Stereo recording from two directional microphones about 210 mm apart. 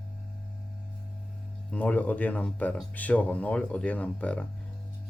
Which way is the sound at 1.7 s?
5° left (ahead or behind).